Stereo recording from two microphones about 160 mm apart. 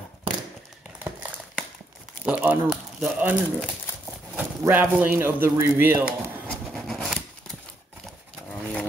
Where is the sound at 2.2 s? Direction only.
10° right (ahead or behind).